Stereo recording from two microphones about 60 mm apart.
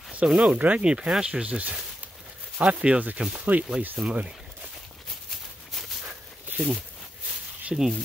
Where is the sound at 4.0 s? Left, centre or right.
Centre.